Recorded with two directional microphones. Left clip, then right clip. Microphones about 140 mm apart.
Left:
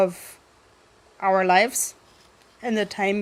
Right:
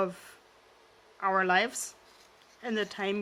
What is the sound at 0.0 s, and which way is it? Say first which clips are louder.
A woman's voice: left 10 dB; 25° left (ahead or behind).